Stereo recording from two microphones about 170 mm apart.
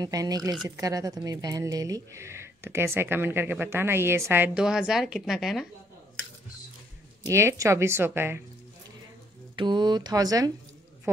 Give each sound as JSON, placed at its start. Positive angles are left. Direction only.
{"t": 0.0, "sound": "a woman's voice", "side_deg": -20}
{"t": 7.2, "sound": "a woman's voice", "side_deg": -15}
{"t": 9.6, "sound": "speech", "side_deg": -25}